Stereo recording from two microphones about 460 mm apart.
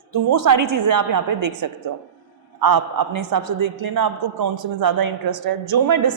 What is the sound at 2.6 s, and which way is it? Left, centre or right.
A woman's voice, right.